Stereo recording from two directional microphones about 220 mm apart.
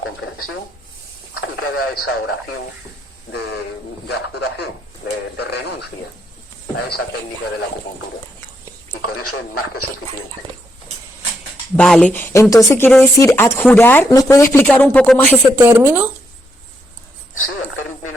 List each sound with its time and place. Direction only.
0.0 s speech: 75° left (ahead or behind)
4.1 s speech: 50° left (ahead or behind)
9.0 s speech: 90° left
11.8 s speech: 5° left (ahead or behind)
15.5 s speech: 10° right (ahead or behind)